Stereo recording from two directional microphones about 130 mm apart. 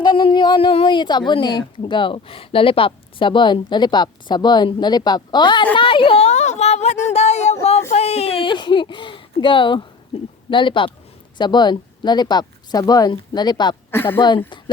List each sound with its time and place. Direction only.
0.0 s a sound: 35° left (ahead or behind)
1.3 s a woman's voice: 35° left (ahead or behind)
13.9 s speech: 15° left (ahead or behind)
14.2 s speech: 35° left (ahead or behind)